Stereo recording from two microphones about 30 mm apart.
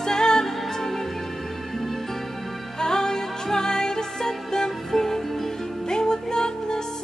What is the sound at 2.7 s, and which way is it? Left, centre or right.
Music, left.